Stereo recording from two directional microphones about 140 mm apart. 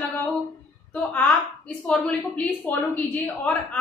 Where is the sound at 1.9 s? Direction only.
5° left (ahead or behind).